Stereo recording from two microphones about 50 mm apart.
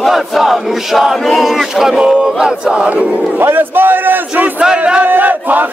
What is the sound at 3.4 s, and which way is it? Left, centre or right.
Speech, right.